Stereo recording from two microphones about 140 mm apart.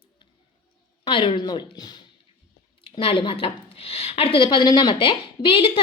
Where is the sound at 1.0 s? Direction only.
35° left (ahead or behind).